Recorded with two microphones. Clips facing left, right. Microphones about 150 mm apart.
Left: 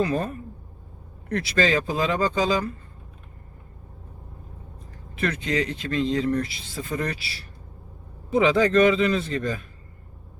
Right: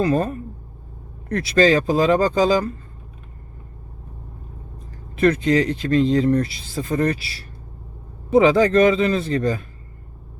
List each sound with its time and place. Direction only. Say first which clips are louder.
0.0 s speech: right 5 dB; 40° right (ahead or behind)
5.1 s speech: right 9 dB; 40° right (ahead or behind)
8.3 s speech: right 5 dB; 35° right (ahead or behind)